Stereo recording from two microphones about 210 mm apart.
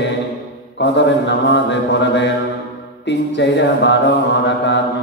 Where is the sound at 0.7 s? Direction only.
55° left (ahead or behind).